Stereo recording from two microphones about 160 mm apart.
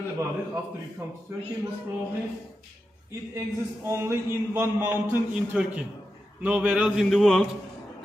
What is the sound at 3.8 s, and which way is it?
A man's voice, 15° right (ahead or behind).